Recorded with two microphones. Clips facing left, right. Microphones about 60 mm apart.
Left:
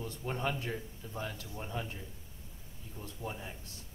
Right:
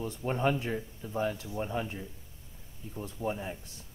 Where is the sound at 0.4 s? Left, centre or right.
Right.